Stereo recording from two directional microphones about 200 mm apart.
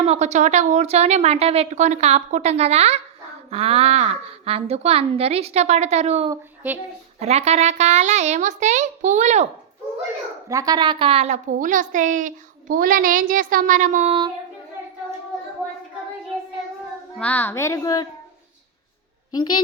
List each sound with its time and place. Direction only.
0.0 s a woman's voice: 35° right (ahead or behind)
6.3 s speech: 10° right (ahead or behind)
7.2 s a woman's voice: 30° right (ahead or behind)
10.5 s a woman's voice: 15° right (ahead or behind); by 14.1 s 40° right (ahead or behind)
17.2 s a woman's voice: 5° left (ahead or behind)
19.3 s a woman's voice: 20° left (ahead or behind)